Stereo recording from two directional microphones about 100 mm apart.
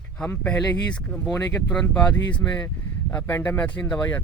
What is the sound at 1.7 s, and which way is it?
Speech, 10° left (ahead or behind).